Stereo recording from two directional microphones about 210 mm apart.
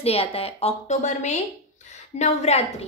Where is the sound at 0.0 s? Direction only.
25° left (ahead or behind).